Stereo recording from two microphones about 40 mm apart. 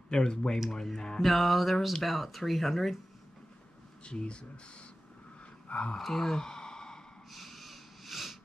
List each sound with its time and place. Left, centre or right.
0.1 s speech: left
1.2 s speech: centre
4.0 s speech: left
5.9 s speech: centre
7.2 s snort: centre